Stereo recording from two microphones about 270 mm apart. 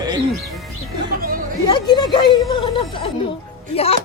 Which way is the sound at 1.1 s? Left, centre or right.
Right.